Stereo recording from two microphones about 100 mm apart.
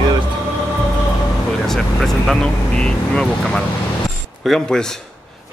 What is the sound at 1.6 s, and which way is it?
Speech, 5° left (ahead or behind).